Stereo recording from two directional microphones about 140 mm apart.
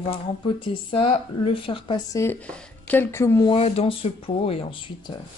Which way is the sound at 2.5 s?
15° left (ahead or behind).